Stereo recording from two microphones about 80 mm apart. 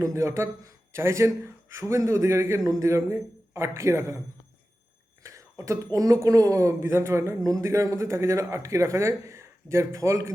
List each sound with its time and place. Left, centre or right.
0.0 s speech: right
5.2 s speech: right